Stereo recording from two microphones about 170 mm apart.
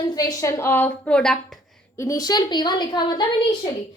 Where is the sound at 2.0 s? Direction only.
20° left (ahead or behind).